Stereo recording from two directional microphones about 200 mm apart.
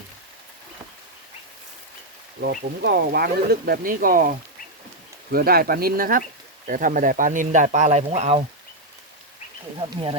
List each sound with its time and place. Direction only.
2.4 s speech: 50° right (ahead or behind); by 8.4 s 30° right (ahead or behind)